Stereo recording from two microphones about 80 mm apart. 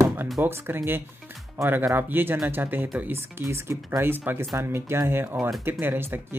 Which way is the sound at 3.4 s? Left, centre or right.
Right.